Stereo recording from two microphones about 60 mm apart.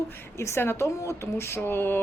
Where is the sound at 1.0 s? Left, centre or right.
Left.